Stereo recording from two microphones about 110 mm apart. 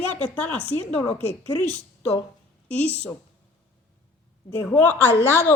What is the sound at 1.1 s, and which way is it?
Speech, 80° left.